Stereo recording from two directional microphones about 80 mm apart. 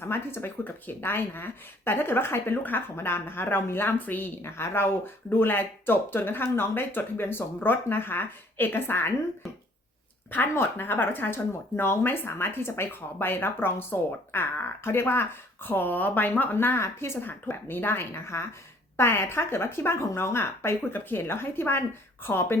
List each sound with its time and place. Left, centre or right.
0.0 s speech: left
10.3 s speech: left